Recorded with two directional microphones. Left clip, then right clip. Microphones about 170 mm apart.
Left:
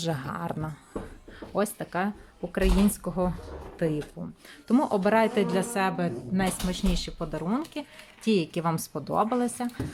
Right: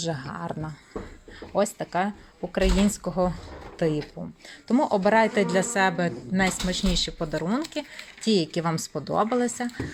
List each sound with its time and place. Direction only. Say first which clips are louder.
0.0 s a woman's voice: even; 15° left (ahead or behind)